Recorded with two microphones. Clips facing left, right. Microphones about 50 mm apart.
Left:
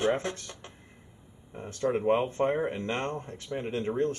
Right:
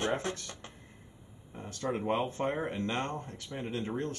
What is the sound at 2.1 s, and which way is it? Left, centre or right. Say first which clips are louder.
Speech: left 5 dB; left.